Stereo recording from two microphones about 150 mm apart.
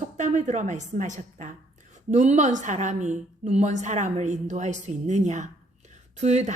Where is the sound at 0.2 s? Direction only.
50° right (ahead or behind).